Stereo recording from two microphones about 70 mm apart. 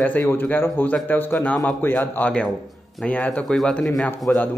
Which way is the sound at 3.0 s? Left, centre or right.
Centre.